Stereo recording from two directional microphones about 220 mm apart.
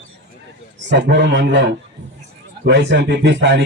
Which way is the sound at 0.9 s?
50° right (ahead or behind).